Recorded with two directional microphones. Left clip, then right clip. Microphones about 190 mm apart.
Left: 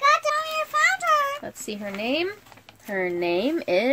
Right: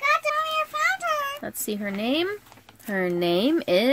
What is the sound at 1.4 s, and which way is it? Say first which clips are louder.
Speech: right 2 dB; 55° right (ahead or behind).